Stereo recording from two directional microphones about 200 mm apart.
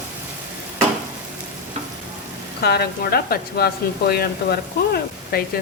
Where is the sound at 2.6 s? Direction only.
50° left (ahead or behind).